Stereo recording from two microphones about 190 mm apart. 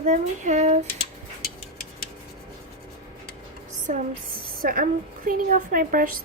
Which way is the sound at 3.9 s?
40° right (ahead or behind).